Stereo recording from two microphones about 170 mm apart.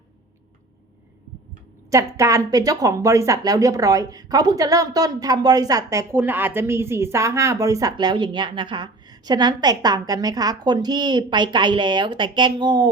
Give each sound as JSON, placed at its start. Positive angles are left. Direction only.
{"t": 1.9, "sound": "speech", "side_deg": -20}